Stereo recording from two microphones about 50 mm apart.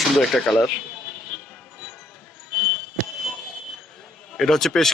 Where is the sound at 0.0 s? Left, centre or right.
Centre.